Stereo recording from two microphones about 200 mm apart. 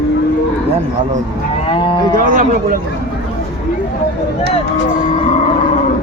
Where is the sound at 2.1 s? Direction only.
45° right (ahead or behind).